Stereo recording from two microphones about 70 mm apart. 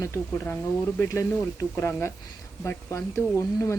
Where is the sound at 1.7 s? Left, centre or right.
Left.